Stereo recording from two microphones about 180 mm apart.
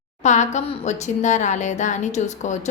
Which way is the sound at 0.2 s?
40° left (ahead or behind).